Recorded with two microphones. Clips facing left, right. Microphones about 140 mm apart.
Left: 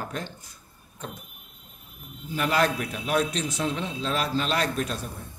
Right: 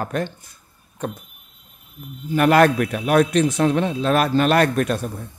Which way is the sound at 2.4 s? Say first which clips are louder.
Right 10 dB; 60° right (ahead or behind).